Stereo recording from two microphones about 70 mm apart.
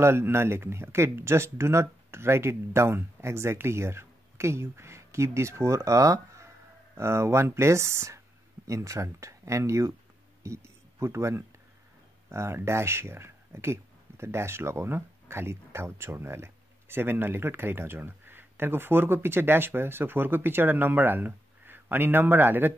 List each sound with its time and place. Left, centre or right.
0.0 s speech: right
7.0 s speech: right